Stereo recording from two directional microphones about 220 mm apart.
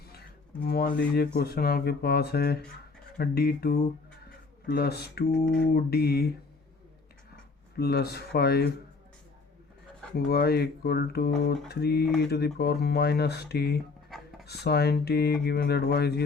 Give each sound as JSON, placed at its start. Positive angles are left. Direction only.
{"t": 0.6, "sound": "speech", "side_deg": 45}
{"t": 7.8, "sound": "speech", "side_deg": 45}
{"t": 10.2, "sound": "speech", "side_deg": 45}